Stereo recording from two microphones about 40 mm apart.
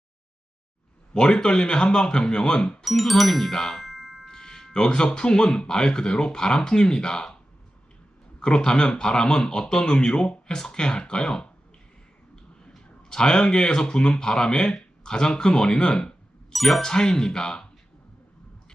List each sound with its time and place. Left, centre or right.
1.1 s speech: centre
2.8 s speech: centre
4.3 s speech: centre
8.4 s speech: left
13.1 s speech: centre
16.5 s ding: centre
16.8 s speech: centre